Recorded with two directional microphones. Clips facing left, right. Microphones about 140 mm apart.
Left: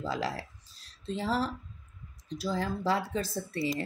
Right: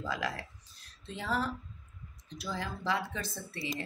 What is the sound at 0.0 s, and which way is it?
Speech, 30° left (ahead or behind).